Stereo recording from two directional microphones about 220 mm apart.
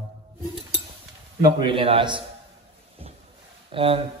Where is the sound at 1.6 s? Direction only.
25° right (ahead or behind).